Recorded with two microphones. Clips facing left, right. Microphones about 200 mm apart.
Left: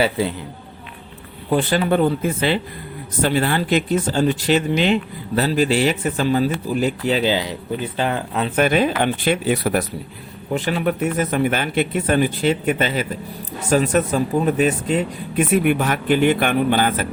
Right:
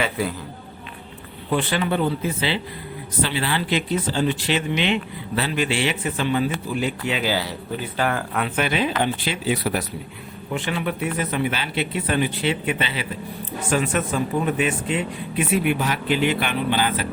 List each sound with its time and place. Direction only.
0.0 s speech: 25° left (ahead or behind)
1.5 s speech: 40° left (ahead or behind)
7.3 s speech: 20° left (ahead or behind)
8.5 s speech: 45° left (ahead or behind)
10.5 s speech: 40° left (ahead or behind)